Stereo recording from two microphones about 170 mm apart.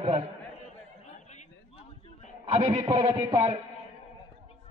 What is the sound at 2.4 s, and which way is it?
A man's voice, 35° right (ahead or behind).